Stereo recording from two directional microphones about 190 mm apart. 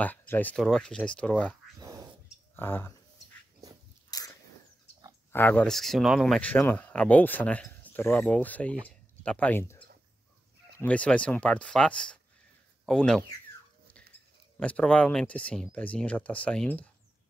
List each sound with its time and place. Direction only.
0.0 s speech: 10° left (ahead or behind)
1.8 s a sound: 20° right (ahead or behind)
2.5 s speech: 10° left (ahead or behind)
4.1 s biting: 20° left (ahead or behind)
5.3 s speech: 10° left (ahead or behind)
10.8 s speech: 5° left (ahead or behind)
14.6 s speech: 5° left (ahead or behind)